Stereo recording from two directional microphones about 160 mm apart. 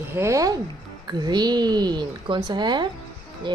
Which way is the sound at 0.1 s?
15° right (ahead or behind).